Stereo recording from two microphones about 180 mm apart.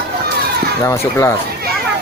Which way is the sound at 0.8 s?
15° left (ahead or behind).